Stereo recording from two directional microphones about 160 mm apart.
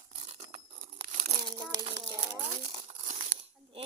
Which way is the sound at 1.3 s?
30° right (ahead or behind).